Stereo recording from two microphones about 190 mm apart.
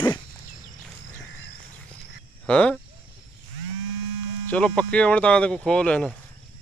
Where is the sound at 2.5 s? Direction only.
5° left (ahead or behind).